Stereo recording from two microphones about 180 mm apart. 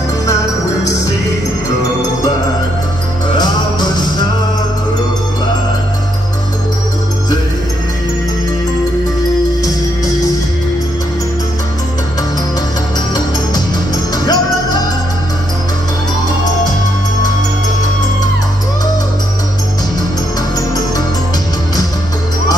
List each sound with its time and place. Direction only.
14.1 s music: 20° left (ahead or behind)
20.5 s music: 20° left (ahead or behind)